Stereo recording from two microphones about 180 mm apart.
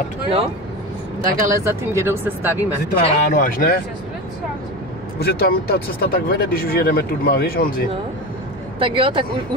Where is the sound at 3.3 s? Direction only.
50° left (ahead or behind).